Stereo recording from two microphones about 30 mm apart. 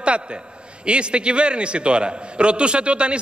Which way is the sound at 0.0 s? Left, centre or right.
Right.